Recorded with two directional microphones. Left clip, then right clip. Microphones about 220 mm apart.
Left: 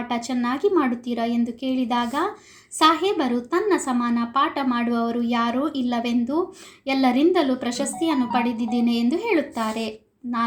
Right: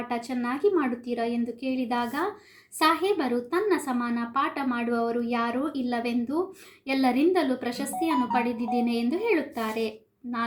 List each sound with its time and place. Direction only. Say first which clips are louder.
0.1 s a woman's voice: left 6 dB; 30° left (ahead or behind)